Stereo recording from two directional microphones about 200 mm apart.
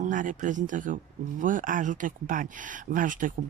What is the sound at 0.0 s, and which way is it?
Speech, 40° right (ahead or behind).